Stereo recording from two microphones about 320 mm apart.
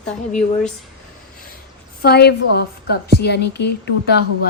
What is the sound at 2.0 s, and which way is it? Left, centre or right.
Speech, left.